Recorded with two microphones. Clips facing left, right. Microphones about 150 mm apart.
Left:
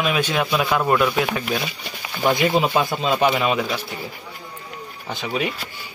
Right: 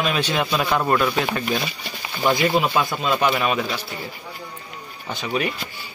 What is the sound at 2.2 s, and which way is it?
Speech, 20° left (ahead or behind).